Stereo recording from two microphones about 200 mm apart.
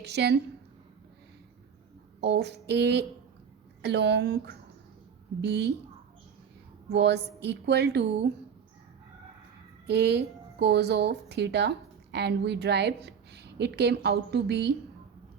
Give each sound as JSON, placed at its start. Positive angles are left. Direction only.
{"t": 0.0, "sound": "speech", "side_deg": -55}
{"t": 2.2, "sound": "speech", "side_deg": -55}
{"t": 6.9, "sound": "speech", "side_deg": -55}
{"t": 9.8, "sound": "a woman's voice", "side_deg": -55}